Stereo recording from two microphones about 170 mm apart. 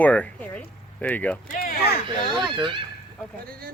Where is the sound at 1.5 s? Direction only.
60° left (ahead or behind).